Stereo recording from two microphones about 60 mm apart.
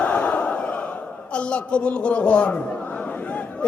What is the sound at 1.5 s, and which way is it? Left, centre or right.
Battle cry, centre.